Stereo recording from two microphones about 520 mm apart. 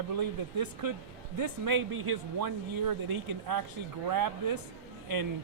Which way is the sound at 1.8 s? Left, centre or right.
Right.